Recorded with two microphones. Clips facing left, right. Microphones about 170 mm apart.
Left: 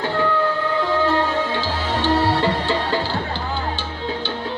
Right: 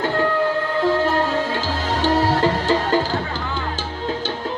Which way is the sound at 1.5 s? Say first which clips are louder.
Even; 40° right (ahead or behind).